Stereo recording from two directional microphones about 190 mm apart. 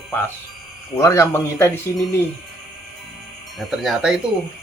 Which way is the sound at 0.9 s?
15° left (ahead or behind).